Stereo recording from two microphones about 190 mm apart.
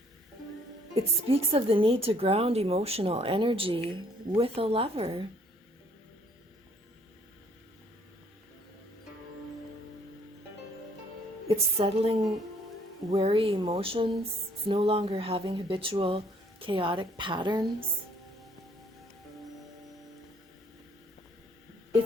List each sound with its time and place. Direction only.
0.9 s a woman's voice: 30° right (ahead or behind)
11.4 s a woman's voice: 30° right (ahead or behind)
13.2 s a woman's voice: 30° right (ahead or behind)
13.6 s a woman's voice: 20° right (ahead or behind)